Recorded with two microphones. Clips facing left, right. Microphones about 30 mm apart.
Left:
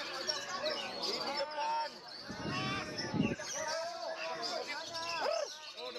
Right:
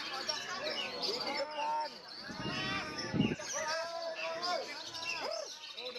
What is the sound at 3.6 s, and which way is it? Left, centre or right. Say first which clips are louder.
Basketball bounce: right 1 dB; right.